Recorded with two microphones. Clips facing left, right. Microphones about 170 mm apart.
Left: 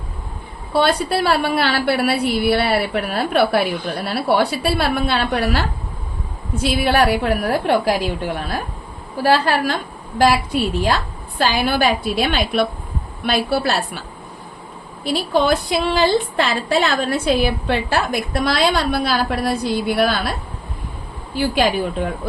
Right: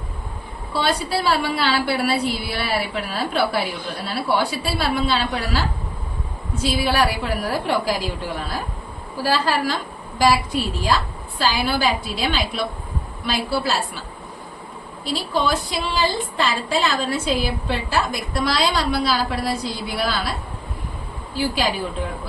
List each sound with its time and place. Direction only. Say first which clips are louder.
0.7 s a woman's voice: left 5 dB; 60° left (ahead or behind)
15.0 s a woman's voice: left 5 dB; 60° left (ahead or behind)
21.3 s a woman's voice: left 5 dB; 60° left (ahead or behind)